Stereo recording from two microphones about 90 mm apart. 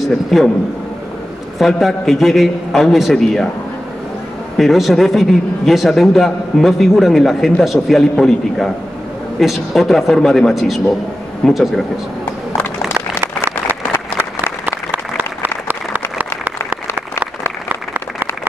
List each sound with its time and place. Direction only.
0.0 s a man's voice: centre (ahead or behind)
1.6 s a man's voice: centre (ahead or behind)
4.6 s a man's voice: centre (ahead or behind)
12.8 s applause: 30° right (ahead or behind)
15.1 s applause: 20° right (ahead or behind)